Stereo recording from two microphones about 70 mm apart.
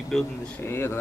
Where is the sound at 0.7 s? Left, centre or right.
Left.